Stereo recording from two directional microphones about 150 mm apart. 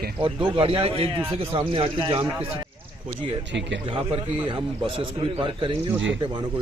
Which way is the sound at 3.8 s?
40° right (ahead or behind).